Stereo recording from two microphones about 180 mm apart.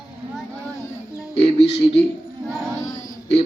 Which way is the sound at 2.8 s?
15° left (ahead or behind).